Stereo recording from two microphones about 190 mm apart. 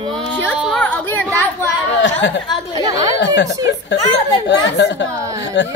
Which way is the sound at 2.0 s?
70° left (ahead or behind).